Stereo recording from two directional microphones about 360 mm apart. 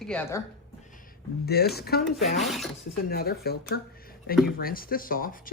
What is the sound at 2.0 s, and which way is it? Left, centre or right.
Speech, centre.